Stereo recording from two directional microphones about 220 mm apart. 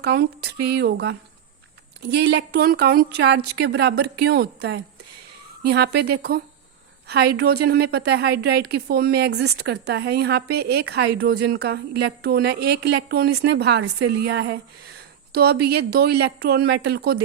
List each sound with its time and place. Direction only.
0.0 s a woman's voice: 50° right (ahead or behind)